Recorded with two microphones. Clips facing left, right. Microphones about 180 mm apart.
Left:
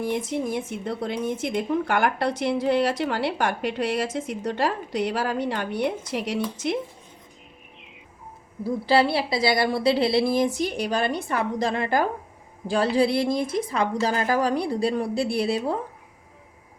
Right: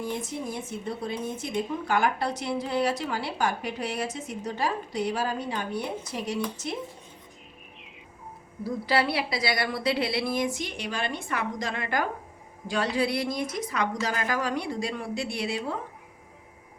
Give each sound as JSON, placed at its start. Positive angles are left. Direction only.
{"t": 0.0, "sound": "speech", "side_deg": 80}
{"t": 8.6, "sound": "a woman's voice", "side_deg": 30}